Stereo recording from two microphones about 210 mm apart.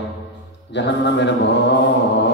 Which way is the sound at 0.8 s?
55° left (ahead or behind).